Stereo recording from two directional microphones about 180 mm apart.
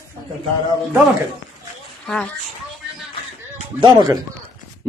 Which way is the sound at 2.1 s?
5° left (ahead or behind).